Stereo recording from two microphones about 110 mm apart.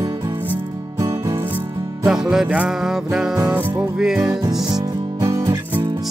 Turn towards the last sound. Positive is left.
turn(degrees=-30)  # may be behind; listen again after turning